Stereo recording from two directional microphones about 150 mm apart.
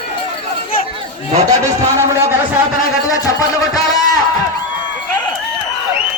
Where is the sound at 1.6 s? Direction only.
20° right (ahead or behind).